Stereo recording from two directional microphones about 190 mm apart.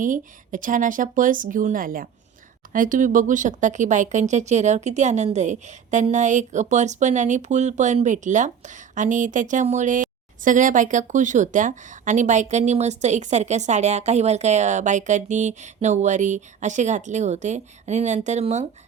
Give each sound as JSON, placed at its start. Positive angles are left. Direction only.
{"t": 0.0, "sound": "speech", "side_deg": -45}